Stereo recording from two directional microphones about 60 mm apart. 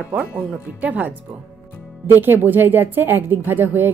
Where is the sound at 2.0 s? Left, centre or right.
Right.